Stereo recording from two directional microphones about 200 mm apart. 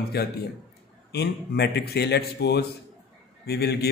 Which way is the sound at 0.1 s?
55° left (ahead or behind).